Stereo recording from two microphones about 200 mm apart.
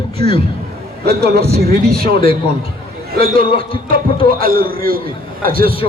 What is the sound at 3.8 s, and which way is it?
A man's voice, 45° right (ahead or behind).